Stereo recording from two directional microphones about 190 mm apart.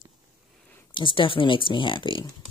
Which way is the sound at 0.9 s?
25° left (ahead or behind).